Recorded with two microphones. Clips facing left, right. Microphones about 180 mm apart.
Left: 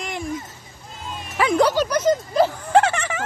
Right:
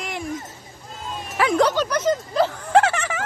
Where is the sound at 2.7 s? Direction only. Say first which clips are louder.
Even; centre (ahead or behind).